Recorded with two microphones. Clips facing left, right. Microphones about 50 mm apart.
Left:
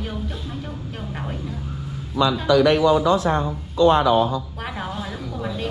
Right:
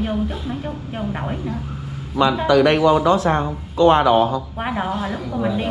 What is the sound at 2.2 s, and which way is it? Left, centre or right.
A man's voice, right.